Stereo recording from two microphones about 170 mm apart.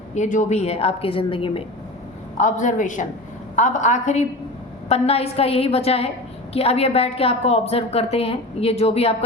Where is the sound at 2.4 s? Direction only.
45° left (ahead or behind).